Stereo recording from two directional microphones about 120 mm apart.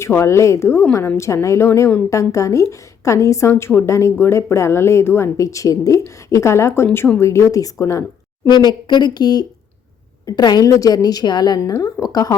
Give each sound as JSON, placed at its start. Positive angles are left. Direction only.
{"t": 0.0, "sound": "a woman's voice", "side_deg": 25}
{"t": 8.4, "sound": "a woman's voice", "side_deg": 35}